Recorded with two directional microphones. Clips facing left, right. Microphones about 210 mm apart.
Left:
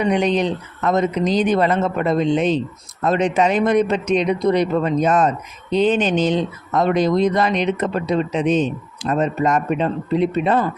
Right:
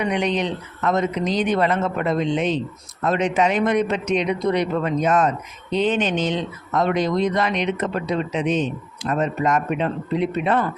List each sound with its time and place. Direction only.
0.0 s speech: 35° left (ahead or behind)